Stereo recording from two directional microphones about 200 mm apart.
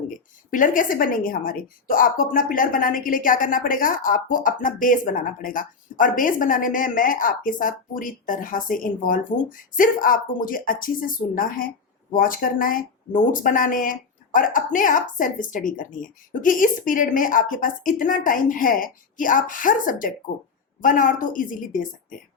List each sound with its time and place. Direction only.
0.5 s a woman's voice: 40° left (ahead or behind)